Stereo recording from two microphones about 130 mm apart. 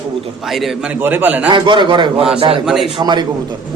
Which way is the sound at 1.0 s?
15° right (ahead or behind).